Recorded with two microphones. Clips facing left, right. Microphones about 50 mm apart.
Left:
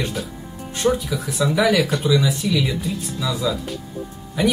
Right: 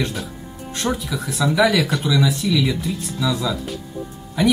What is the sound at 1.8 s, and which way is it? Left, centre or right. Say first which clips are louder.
Speech: left 1 dB; centre.